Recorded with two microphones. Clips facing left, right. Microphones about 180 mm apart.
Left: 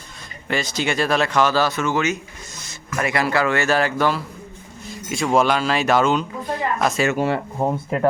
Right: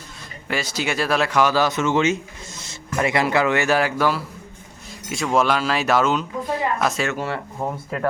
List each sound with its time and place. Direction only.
0.4 s speech: 5° right (ahead or behind)
7.1 s speech: 15° left (ahead or behind)